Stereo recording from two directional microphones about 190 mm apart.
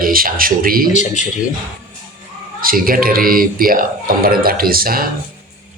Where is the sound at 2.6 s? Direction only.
50° right (ahead or behind).